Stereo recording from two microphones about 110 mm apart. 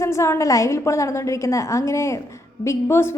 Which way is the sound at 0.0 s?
25° left (ahead or behind).